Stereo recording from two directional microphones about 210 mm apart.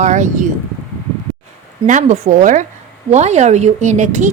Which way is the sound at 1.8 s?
35° right (ahead or behind).